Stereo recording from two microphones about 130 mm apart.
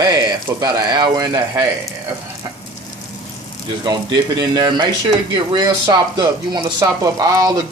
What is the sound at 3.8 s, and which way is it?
Speech, 35° right (ahead or behind).